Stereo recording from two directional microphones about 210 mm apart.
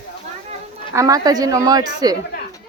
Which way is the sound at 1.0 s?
15° right (ahead or behind).